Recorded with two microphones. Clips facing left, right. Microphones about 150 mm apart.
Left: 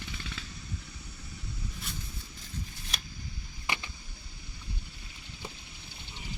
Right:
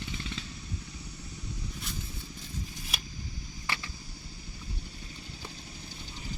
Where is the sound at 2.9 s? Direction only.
5° right (ahead or behind).